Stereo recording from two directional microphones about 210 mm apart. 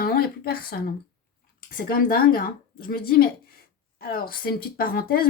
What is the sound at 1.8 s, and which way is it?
A woman's voice, 45° left (ahead or behind).